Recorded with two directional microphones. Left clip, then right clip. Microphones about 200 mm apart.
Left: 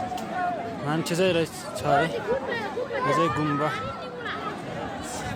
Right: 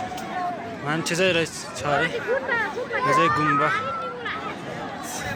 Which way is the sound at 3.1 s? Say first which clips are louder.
Right 6 dB; 10° left (ahead or behind).